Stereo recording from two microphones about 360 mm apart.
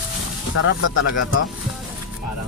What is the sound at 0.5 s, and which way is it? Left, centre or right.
Speech, left.